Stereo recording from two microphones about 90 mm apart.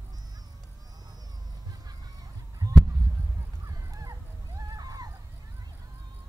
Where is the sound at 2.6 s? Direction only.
40° right (ahead or behind).